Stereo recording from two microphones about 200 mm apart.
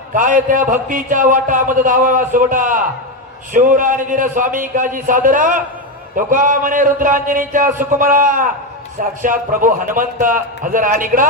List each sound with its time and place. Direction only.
0.1 s a man's voice: 40° right (ahead or behind)